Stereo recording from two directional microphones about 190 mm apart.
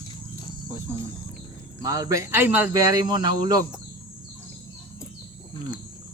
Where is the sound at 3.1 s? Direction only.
20° right (ahead or behind).